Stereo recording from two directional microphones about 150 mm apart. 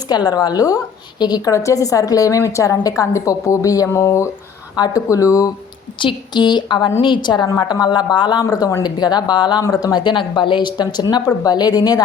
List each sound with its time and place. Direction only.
0.1 s a woman's voice: 25° left (ahead or behind)